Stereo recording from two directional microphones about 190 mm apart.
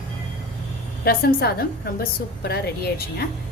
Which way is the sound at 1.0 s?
55° left (ahead or behind).